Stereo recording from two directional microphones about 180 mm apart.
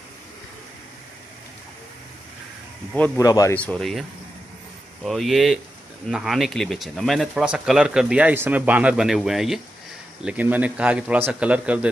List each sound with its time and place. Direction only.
3.2 s speech: 20° left (ahead or behind)
3.5 s speech: 5° left (ahead or behind)
5.0 s a man's voice: centre (ahead or behind)